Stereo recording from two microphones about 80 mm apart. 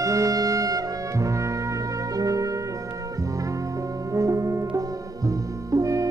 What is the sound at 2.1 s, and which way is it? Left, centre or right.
Trumpet, right.